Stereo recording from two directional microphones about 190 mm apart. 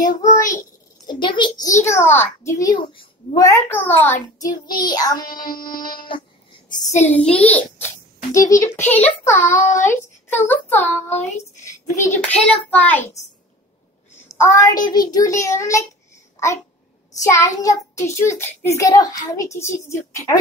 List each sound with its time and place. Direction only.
0.0 s child singing: 20° left (ahead or behind)
1.0 s a child's voice: 25° left (ahead or behind)
1.8 s a child's voice: 15° left (ahead or behind)
4.6 s a child's voice: 20° left (ahead or behind)
14.3 s a child's voice: 15° left (ahead or behind)
17.2 s a child's voice: 15° left (ahead or behind)